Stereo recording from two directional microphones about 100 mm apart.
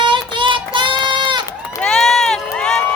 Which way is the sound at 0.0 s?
50° right (ahead or behind).